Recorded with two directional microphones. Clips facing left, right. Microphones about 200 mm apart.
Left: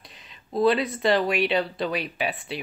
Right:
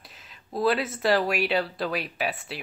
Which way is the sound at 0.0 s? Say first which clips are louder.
Left 1 dB; 5° right (ahead or behind).